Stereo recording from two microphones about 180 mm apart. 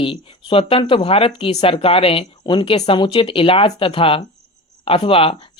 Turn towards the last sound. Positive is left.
turn(degrees=30)  # may be behind; listen again after turning